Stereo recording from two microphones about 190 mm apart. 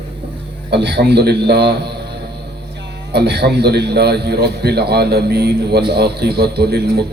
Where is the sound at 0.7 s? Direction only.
60° right (ahead or behind).